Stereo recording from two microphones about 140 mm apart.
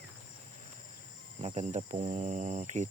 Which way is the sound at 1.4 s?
50° right (ahead or behind).